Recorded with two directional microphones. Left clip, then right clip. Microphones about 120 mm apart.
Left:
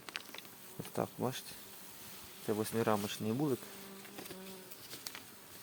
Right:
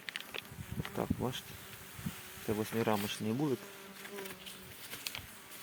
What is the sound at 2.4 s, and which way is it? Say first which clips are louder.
Speech: even; 5° right (ahead or behind).